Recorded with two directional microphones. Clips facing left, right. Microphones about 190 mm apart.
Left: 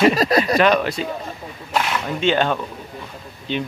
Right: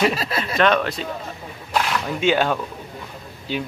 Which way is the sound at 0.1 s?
40° left (ahead or behind).